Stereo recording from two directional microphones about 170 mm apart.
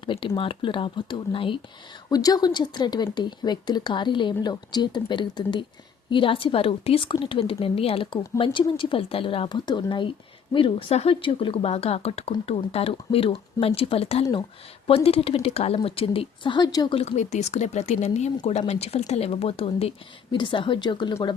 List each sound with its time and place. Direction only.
0.0 s a woman's voice: 30° left (ahead or behind)
21.1 s speech: 15° left (ahead or behind)